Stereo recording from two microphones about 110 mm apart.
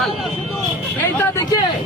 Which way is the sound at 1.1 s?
25° left (ahead or behind).